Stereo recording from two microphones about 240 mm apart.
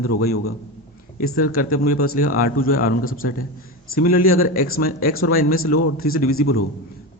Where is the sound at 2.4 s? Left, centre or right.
Left.